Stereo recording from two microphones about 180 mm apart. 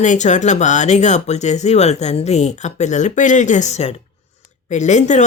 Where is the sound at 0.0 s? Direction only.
40° left (ahead or behind).